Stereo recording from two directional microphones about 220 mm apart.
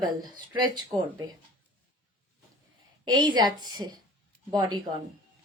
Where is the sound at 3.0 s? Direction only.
20° right (ahead or behind).